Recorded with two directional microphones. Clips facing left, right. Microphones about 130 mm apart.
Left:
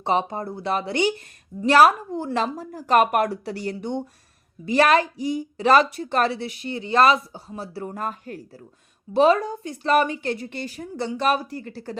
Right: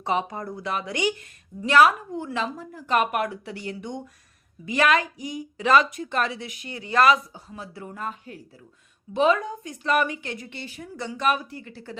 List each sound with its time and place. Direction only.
0.0 s a woman's voice: 30° left (ahead or behind); by 8.6 s 45° left (ahead or behind)
9.1 s a woman's voice: 35° left (ahead or behind)